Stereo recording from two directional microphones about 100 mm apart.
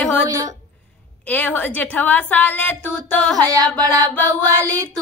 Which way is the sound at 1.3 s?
15° left (ahead or behind).